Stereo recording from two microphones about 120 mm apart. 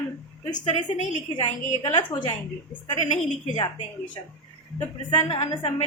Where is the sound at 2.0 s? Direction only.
40° left (ahead or behind).